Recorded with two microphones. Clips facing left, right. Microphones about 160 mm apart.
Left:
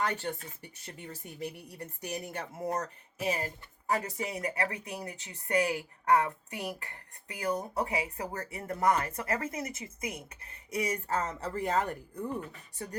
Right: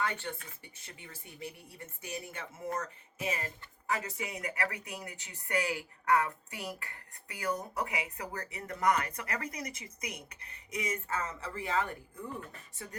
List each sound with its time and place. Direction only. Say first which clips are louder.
0.0 s speech: left 3 dB; 40° left (ahead or behind)